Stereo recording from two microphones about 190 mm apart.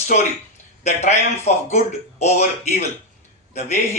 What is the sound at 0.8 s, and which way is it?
Speech, 35° left (ahead or behind).